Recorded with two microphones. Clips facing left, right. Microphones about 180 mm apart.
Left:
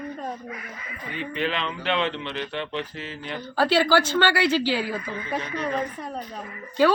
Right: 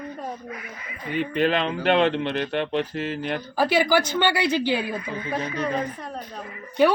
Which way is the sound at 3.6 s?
15° right (ahead or behind).